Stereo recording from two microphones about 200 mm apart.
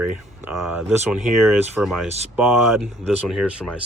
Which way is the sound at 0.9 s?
Centre (ahead or behind).